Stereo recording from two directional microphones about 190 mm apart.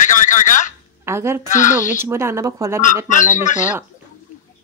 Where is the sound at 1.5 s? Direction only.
40° left (ahead or behind).